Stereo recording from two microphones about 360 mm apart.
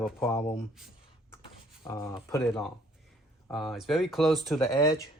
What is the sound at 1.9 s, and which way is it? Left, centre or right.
Speech, centre.